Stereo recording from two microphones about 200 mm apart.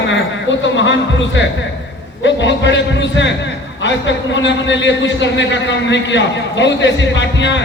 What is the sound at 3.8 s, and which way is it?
A man's voice, 65° left (ahead or behind).